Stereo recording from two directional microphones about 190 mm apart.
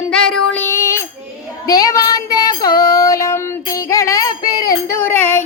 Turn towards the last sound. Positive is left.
turn(degrees=10)  # may be behind; listen again after turning